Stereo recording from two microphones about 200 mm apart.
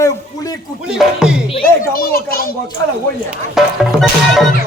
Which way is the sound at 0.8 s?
5° right (ahead or behind).